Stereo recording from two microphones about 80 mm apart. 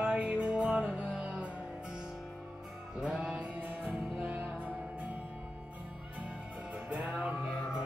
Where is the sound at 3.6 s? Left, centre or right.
Right.